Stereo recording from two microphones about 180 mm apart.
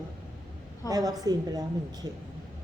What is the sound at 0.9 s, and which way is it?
Speech, 20° right (ahead or behind).